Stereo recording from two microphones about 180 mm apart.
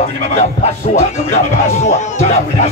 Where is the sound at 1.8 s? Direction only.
40° left (ahead or behind).